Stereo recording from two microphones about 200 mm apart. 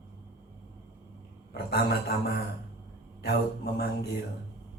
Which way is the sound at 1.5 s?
55° left (ahead or behind).